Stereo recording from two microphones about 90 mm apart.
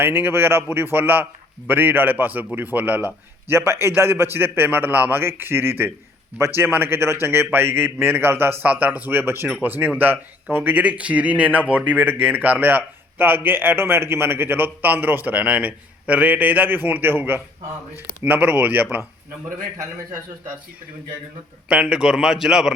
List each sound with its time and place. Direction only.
0.0 s speech: 25° right (ahead or behind)
21.7 s a man's voice: 10° right (ahead or behind)